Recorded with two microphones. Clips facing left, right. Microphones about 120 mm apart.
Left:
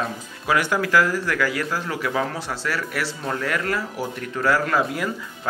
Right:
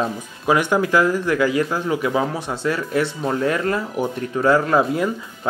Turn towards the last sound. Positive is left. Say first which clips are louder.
# right 5 dB
turn(degrees=-25)  # may be behind; listen again after turning